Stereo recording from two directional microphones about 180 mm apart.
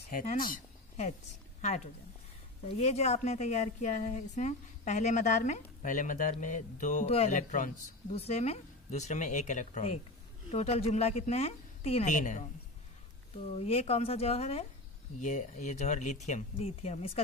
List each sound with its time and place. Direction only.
0.1 s speech: 50° left (ahead or behind)
2.8 s a woman's voice: 35° left (ahead or behind)
13.6 s a woman's voice: 35° left (ahead or behind)